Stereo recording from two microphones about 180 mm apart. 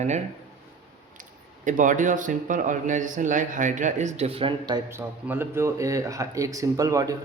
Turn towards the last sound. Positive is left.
turn(degrees=-20)  # may be behind; listen again after turning